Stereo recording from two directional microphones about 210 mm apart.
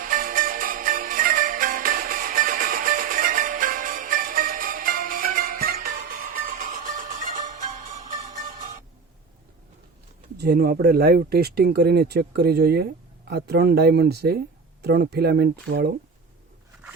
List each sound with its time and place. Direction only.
0.0 s music: 40° right (ahead or behind)
10.3 s speech: 50° right (ahead or behind)